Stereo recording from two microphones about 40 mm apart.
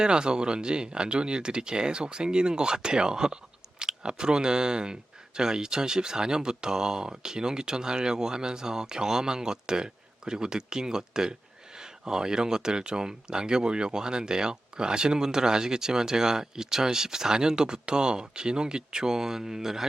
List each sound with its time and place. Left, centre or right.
0.0 s speech: right